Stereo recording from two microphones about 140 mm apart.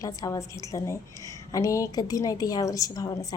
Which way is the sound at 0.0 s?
25° left (ahead or behind).